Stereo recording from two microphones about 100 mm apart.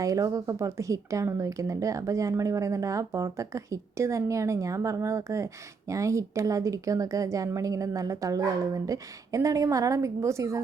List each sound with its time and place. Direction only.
0.0 s speech: 35° right (ahead or behind)